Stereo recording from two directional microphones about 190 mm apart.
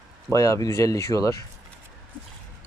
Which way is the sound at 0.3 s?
20° left (ahead or behind).